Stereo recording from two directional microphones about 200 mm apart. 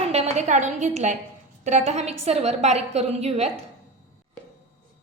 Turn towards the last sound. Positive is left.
turn(degrees=-30)  # may be behind; listen again after turning